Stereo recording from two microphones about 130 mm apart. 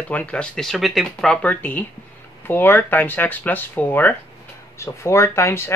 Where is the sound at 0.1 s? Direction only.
10° left (ahead or behind).